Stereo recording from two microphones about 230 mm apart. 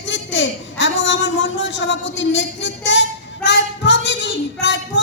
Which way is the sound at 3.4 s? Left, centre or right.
Left.